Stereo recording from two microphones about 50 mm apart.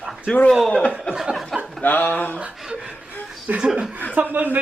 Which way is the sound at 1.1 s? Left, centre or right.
Left.